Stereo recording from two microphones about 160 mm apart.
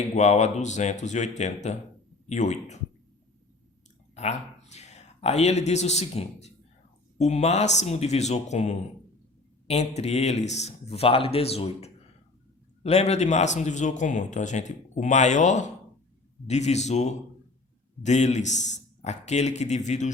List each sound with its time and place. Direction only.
0.2 s a man's voice: 45° left (ahead or behind)
4.1 s a man's voice: 45° left (ahead or behind)